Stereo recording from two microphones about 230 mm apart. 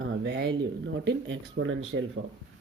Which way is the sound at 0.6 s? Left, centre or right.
Right.